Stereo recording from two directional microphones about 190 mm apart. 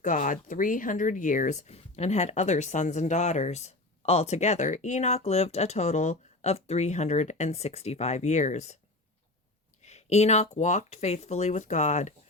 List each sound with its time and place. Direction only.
0.0 s speech: 40° left (ahead or behind)
9.8 s speech: 35° left (ahead or behind)